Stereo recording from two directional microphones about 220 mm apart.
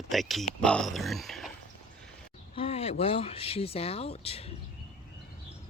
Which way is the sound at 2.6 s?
25° left (ahead or behind).